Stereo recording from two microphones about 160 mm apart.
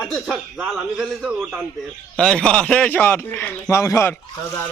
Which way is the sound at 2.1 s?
5° left (ahead or behind).